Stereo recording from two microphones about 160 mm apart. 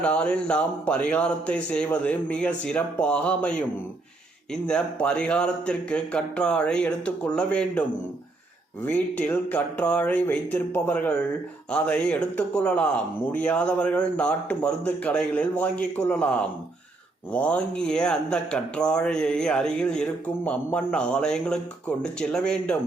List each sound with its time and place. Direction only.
0.0 s speech: 5° left (ahead or behind)
4.5 s speech: 5° left (ahead or behind)